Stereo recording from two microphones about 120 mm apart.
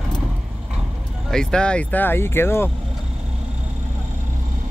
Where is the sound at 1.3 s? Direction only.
5° left (ahead or behind).